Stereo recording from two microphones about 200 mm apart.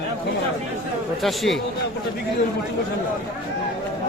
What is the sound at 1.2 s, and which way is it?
Speech, centre (ahead or behind).